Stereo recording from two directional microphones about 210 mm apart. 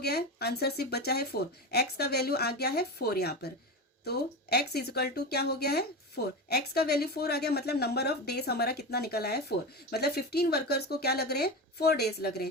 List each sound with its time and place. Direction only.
0.0 s speech: 50° left (ahead or behind)